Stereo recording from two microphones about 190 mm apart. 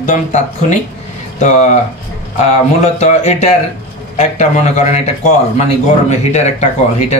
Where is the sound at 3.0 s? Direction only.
35° left (ahead or behind).